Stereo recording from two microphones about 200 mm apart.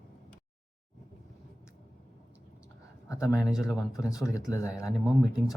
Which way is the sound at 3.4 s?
Centre (ahead or behind).